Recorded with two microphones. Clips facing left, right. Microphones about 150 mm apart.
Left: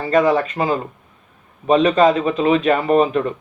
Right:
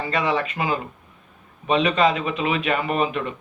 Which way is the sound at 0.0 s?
40° left (ahead or behind).